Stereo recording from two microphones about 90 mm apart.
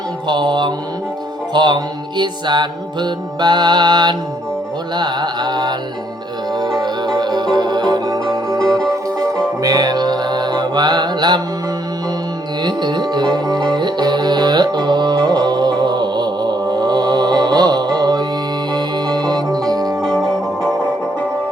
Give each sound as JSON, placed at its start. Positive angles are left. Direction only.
{"t": 0.3, "sound": "mantra", "side_deg": -60}
{"t": 1.5, "sound": "music", "side_deg": -55}
{"t": 6.8, "sound": "music", "side_deg": -55}
{"t": 8.5, "sound": "music", "side_deg": 5}
{"t": 9.2, "sound": "music", "side_deg": -40}
{"t": 12.6, "sound": "music", "side_deg": -55}
{"t": 20.0, "sound": "music", "side_deg": 5}